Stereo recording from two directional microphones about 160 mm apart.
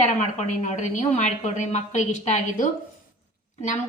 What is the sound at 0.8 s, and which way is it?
A woman's voice, 45° left (ahead or behind).